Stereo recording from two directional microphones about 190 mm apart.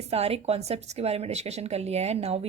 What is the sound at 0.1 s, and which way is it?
Speech, 30° right (ahead or behind).